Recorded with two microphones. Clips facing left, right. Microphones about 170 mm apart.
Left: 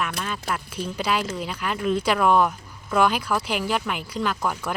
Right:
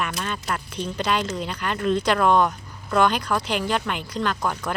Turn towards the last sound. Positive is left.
turn(degrees=10)  # may be behind; listen again after turning